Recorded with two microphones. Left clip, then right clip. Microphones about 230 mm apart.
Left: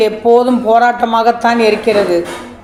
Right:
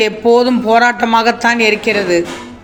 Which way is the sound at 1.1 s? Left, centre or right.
Right.